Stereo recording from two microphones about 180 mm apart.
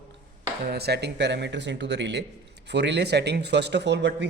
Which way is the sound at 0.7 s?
65° right (ahead or behind).